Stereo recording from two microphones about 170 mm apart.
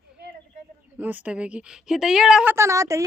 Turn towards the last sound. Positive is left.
turn(degrees=-20)  # may be behind; listen again after turning